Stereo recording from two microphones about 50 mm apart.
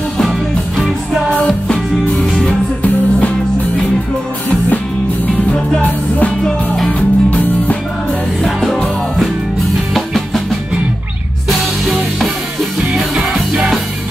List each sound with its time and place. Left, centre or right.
0.2 s music: centre
1.3 s music: centre
5.5 s music: left
8.5 s music: centre
11.4 s music: centre